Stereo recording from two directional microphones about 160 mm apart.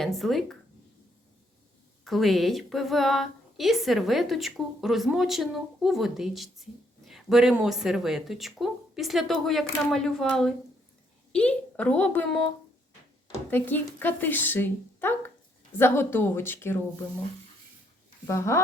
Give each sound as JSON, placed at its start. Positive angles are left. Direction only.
{"t": 0.0, "sound": "a woman's voice", "side_deg": 0}
{"t": 2.0, "sound": "a woman's voice", "side_deg": 0}
{"t": 13.5, "sound": "speech", "side_deg": 10}
{"t": 18.3, "sound": "speech", "side_deg": 20}